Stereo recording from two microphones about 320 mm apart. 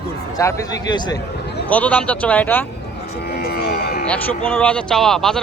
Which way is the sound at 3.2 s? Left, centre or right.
Left.